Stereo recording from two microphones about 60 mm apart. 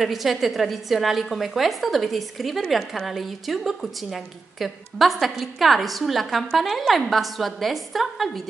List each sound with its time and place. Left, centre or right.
0.0 s a woman's voice: centre